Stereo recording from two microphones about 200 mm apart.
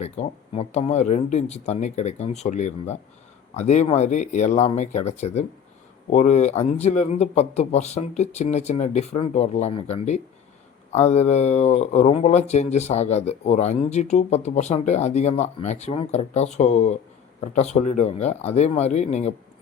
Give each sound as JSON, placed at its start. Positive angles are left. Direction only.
{"t": 0.0, "sound": "speech", "side_deg": 30}